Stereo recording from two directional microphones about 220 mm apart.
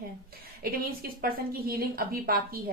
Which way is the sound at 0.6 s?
40° right (ahead or behind).